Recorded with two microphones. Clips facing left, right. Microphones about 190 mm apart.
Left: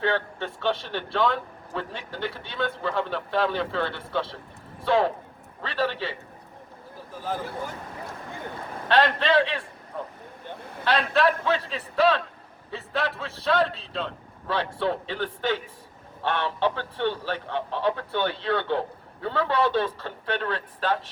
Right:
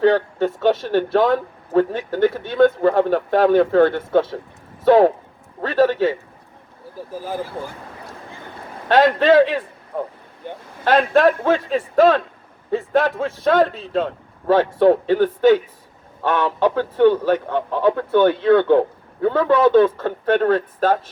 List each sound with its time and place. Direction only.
0.0 s a man's voice: 40° right (ahead or behind)
8.9 s a man's voice: 45° right (ahead or behind)